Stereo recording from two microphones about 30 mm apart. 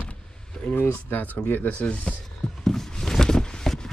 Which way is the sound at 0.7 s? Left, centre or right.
Left.